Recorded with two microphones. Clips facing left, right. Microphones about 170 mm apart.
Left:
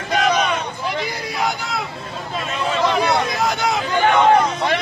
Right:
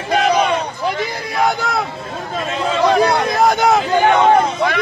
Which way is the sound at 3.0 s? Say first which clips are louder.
Right 5 dB; 45° right (ahead or behind).